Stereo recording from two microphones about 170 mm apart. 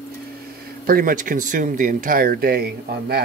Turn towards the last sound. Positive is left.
turn(degrees=-65)  # may be behind; listen again after turning